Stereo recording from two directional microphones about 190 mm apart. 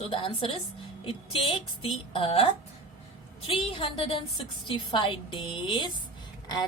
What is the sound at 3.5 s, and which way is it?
A woman's voice, 25° left (ahead or behind).